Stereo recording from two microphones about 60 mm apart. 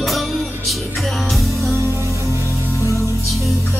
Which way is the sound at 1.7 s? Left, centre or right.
Right.